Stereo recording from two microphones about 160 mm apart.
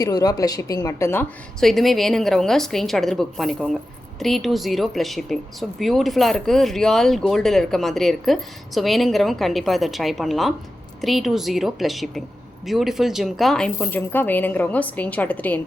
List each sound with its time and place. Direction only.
0.0 s speech: 25° left (ahead or behind)
1.6 s speech: centre (ahead or behind)